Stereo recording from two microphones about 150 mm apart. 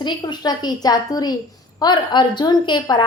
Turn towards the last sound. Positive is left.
turn(degrees=30)  # may be behind; listen again after turning